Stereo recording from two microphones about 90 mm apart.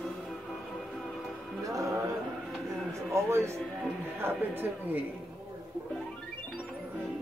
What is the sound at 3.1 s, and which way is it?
Music, 30° right (ahead or behind).